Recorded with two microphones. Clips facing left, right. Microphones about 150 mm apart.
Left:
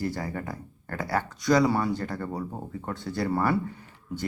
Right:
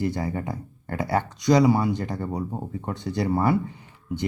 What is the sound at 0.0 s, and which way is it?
Speech, 20° right (ahead or behind).